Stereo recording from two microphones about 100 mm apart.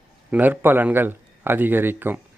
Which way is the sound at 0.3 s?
15° right (ahead or behind).